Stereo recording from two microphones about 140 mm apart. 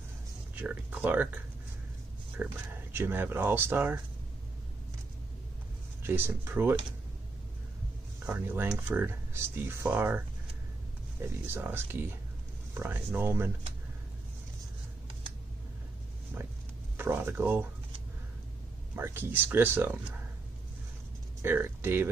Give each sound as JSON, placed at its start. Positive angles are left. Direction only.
{"t": 0.6, "sound": "speech", "side_deg": -15}
{"t": 6.0, "sound": "speech", "side_deg": -15}
{"t": 8.3, "sound": "speech", "side_deg": -15}
{"t": 16.9, "sound": "speech", "side_deg": -15}
{"t": 18.9, "sound": "speech", "side_deg": -15}
{"t": 21.4, "sound": "speech", "side_deg": -15}